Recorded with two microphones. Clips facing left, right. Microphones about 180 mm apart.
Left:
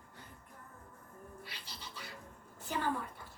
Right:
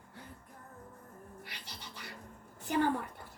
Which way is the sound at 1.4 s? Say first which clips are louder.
Right 1 dB; 65° right (ahead or behind).